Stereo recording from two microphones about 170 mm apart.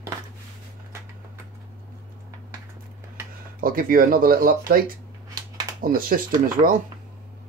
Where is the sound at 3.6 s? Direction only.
55° right (ahead or behind).